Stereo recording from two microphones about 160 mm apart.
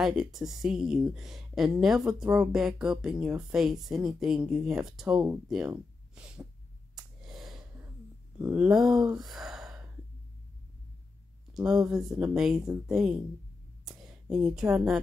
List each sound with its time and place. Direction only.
0.0 s speech: 5° right (ahead or behind)
7.2 s a sound: centre (ahead or behind)
8.4 s speech: 10° right (ahead or behind)
11.5 s speech: 5° right (ahead or behind)
14.3 s speech: 5° right (ahead or behind)